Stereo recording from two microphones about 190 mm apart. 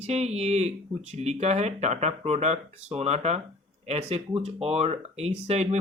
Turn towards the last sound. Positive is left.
turn(degrees=-35)  # may be behind; listen again after turning